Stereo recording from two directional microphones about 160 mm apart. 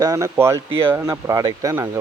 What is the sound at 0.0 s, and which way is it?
Speech, 20° right (ahead or behind).